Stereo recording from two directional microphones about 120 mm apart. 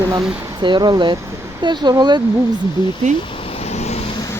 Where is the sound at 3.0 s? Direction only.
80° right.